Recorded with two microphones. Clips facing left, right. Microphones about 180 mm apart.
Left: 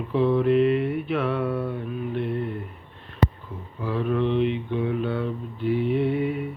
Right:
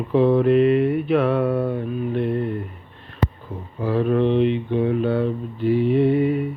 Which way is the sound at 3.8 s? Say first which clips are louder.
Right 5 dB; 40° right (ahead or behind).